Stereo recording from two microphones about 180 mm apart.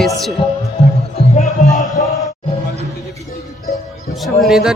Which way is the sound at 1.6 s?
20° left (ahead or behind).